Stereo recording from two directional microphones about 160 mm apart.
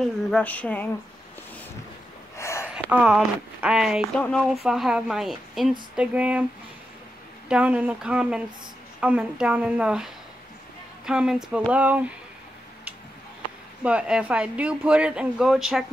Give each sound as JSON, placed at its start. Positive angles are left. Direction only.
{"t": 0.0, "sound": "speech", "side_deg": 5}
{"t": 2.3, "sound": "gasp", "side_deg": 15}
{"t": 2.7, "sound": "speech", "side_deg": -5}
{"t": 7.4, "sound": "speech", "side_deg": -10}
{"t": 13.8, "sound": "speech", "side_deg": -5}